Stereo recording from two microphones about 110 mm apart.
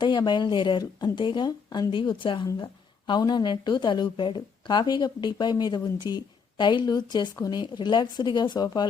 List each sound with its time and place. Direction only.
0.0 s a woman's voice: 40° left (ahead or behind)